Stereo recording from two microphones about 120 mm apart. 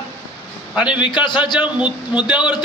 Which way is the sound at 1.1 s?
40° left (ahead or behind).